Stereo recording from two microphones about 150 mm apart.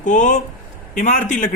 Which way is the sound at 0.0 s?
60° left (ahead or behind).